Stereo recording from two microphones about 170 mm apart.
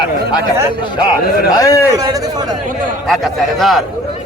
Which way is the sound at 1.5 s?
20° left (ahead or behind).